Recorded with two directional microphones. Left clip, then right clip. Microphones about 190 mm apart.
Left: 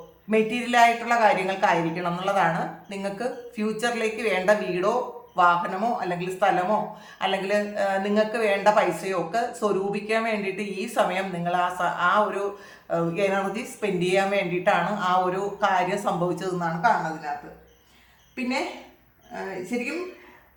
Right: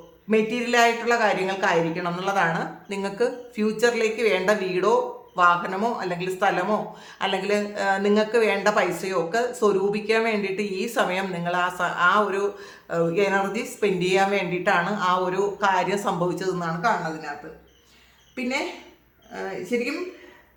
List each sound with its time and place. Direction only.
0.3 s a woman's voice: 20° right (ahead or behind)